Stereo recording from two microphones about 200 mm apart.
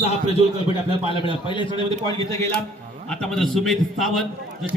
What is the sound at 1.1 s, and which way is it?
A man's voice, 25° left (ahead or behind).